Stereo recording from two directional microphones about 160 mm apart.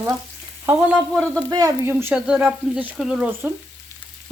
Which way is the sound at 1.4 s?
20° right (ahead or behind).